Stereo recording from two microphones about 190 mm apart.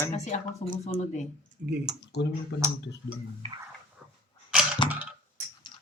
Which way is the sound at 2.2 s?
60° left (ahead or behind).